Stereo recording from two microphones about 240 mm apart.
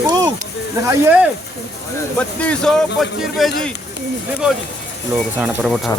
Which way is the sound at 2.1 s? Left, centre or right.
Centre.